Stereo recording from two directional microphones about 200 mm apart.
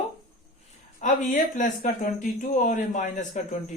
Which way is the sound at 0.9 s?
40° left (ahead or behind).